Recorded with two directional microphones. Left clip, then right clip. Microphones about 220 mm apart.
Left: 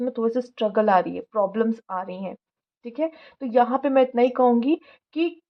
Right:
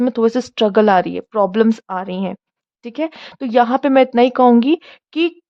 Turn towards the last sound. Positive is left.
turn(degrees=-40)  # may be behind; listen again after turning